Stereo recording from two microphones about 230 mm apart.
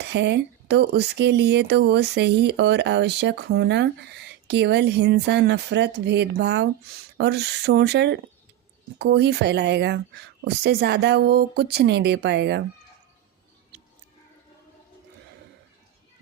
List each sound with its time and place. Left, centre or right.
0.0 s speech: right